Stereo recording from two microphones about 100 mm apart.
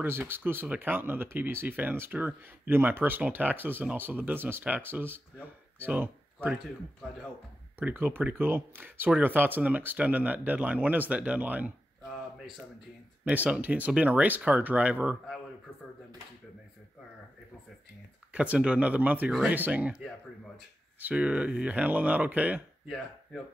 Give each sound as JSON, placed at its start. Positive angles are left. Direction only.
{"t": 0.0, "sound": "speech", "side_deg": -20}
{"t": 7.8, "sound": "speech", "side_deg": -20}
{"t": 13.2, "sound": "speech", "side_deg": -15}
{"t": 18.3, "sound": "speech", "side_deg": -15}
{"t": 21.0, "sound": "speech", "side_deg": -15}